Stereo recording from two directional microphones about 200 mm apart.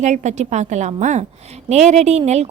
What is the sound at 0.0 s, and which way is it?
A woman's voice, 35° right (ahead or behind).